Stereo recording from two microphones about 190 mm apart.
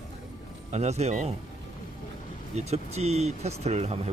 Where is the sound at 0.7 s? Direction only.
35° right (ahead or behind).